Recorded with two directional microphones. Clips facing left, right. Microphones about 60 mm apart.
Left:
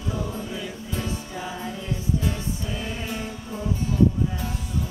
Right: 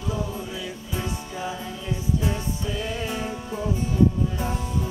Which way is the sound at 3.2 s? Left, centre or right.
Right.